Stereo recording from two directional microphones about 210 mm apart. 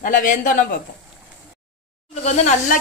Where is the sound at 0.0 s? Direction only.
40° left (ahead or behind).